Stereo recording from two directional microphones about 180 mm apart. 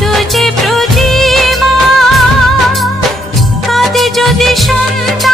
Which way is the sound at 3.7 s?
Centre (ahead or behind).